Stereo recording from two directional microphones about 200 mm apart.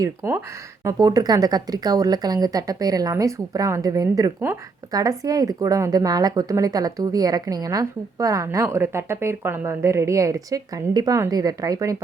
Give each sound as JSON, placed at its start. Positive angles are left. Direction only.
{"t": 0.2, "sound": "a woman's voice", "side_deg": -15}